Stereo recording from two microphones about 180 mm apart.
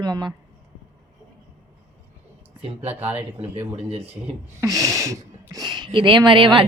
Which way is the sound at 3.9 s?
35° right (ahead or behind).